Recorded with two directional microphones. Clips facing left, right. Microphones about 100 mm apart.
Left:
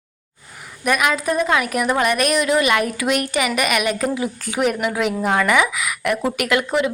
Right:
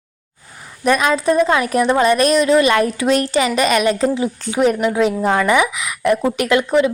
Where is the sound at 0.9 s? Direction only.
30° right (ahead or behind).